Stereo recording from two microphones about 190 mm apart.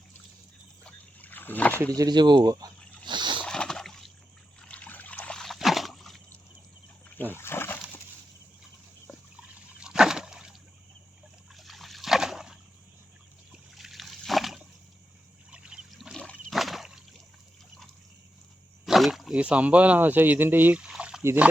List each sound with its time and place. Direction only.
0.9 s rowboat: 10° left (ahead or behind)
2.0 s speech: 20° right (ahead or behind)
3.1 s a sound: 25° right (ahead or behind)
3.4 s splash: 5° left (ahead or behind)
4.6 s trickle: 5° left (ahead or behind)
7.3 s splash: 10° left (ahead or behind)
9.8 s a sound: 5° right (ahead or behind)
11.5 s splash: centre (ahead or behind)
13.5 s trickle: centre (ahead or behind)
15.4 s a sound: 5° right (ahead or behind)
18.9 s speech: centre (ahead or behind)